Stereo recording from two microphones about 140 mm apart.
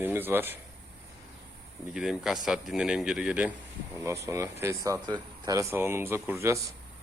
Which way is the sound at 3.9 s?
20° right (ahead or behind).